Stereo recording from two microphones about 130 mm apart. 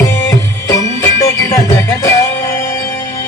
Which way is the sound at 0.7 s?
25° left (ahead or behind).